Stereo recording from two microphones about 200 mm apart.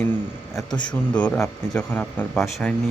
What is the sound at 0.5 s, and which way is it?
Speech, 20° left (ahead or behind).